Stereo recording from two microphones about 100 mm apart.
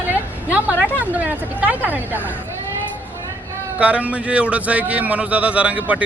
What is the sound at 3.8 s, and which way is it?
Speech, 15° right (ahead or behind).